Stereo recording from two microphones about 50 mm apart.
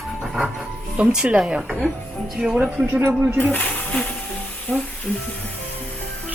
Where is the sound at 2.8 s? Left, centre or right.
Right.